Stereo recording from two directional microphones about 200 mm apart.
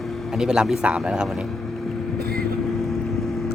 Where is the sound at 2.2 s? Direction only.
50° right (ahead or behind).